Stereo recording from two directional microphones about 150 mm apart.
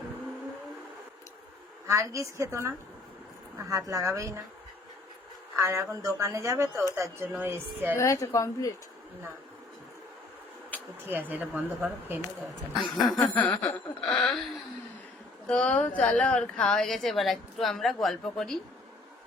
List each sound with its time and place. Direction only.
1.9 s speech: 20° right (ahead or behind)
5.5 s speech: 20° right (ahead or behind)
7.9 s a woman's voice: 20° left (ahead or behind)
10.7 s a sound: 10° left (ahead or behind)
11.1 s speech: 10° right (ahead or behind)
12.7 s a woman's voice: centre (ahead or behind)
15.4 s a woman's voice: 5° left (ahead or behind)